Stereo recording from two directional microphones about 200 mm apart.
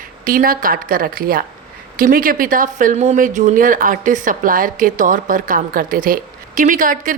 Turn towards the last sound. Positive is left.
turn(degrees=-40)  # may be behind; listen again after turning